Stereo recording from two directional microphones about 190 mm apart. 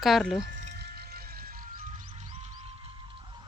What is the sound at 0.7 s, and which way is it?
Music, 60° right (ahead or behind).